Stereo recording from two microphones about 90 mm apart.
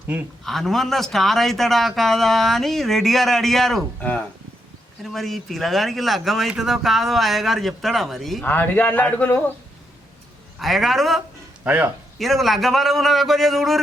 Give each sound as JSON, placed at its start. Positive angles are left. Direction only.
{"t": 0.4, "sound": "speech", "side_deg": 5}
{"t": 5.0, "sound": "speech", "side_deg": 0}
{"t": 8.4, "sound": "a man's voice", "side_deg": 20}
{"t": 10.6, "sound": "speech", "side_deg": 0}
{"t": 11.6, "sound": "speech", "side_deg": -15}
{"t": 12.2, "sound": "speech", "side_deg": 0}